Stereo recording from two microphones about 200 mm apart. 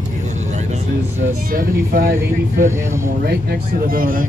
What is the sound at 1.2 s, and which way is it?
Speech, 45° right (ahead or behind).